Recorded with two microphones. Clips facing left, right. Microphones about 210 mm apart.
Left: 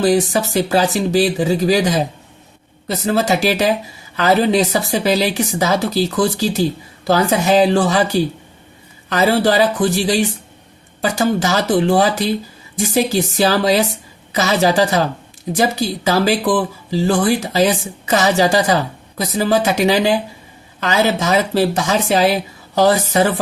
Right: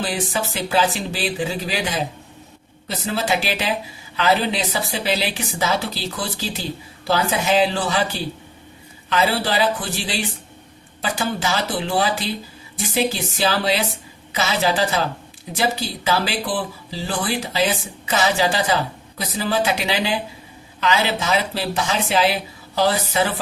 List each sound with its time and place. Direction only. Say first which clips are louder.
0.0 s speech: left 9 dB; 40° left (ahead or behind)